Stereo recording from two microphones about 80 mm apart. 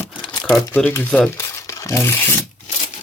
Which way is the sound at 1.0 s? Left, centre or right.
Centre.